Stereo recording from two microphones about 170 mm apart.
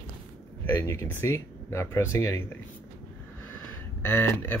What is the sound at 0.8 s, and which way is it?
Speech, 20° left (ahead or behind).